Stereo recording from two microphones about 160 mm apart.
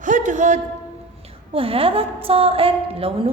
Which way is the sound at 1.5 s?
35° right (ahead or behind).